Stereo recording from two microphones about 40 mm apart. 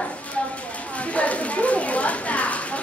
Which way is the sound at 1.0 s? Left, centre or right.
Left.